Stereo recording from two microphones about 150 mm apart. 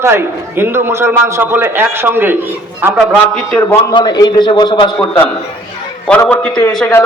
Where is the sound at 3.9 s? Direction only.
25° left (ahead or behind).